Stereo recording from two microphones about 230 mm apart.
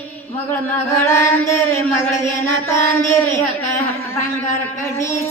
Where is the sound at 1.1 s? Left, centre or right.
Centre.